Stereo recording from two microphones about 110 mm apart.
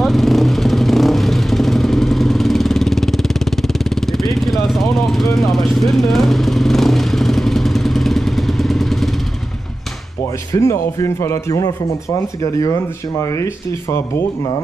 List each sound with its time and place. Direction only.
0.0 s vehicle: centre (ahead or behind)
10.5 s speech: 30° left (ahead or behind)